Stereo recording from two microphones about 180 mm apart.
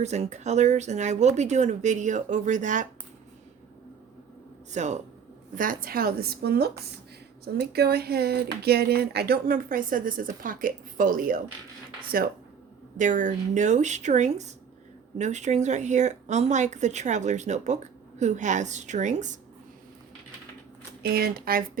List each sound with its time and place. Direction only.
0.0 s speech: 40° right (ahead or behind)
4.7 s speech: 40° right (ahead or behind)
5.5 s speech: 50° right (ahead or behind)
21.0 s speech: 60° right (ahead or behind)